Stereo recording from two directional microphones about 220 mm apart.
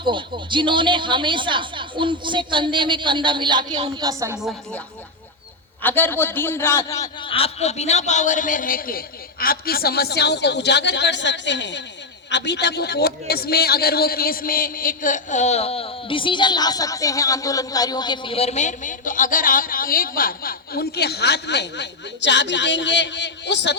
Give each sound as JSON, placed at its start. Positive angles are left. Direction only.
{"t": 0.0, "sound": "a man's voice", "side_deg": -20}
{"t": 4.4, "sound": "a woman's voice", "side_deg": 0}
{"t": 5.8, "sound": "a man's voice", "side_deg": 10}